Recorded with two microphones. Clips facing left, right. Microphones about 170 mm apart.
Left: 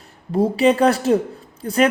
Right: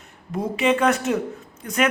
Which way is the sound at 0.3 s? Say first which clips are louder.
Left 5 dB; 30° left (ahead or behind).